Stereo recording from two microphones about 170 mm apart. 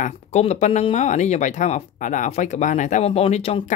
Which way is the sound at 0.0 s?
40° left (ahead or behind).